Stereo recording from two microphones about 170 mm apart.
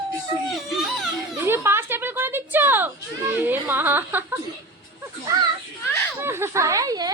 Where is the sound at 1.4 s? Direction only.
15° right (ahead or behind).